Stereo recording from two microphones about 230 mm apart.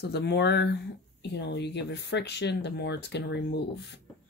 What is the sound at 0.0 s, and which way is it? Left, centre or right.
Speech, left.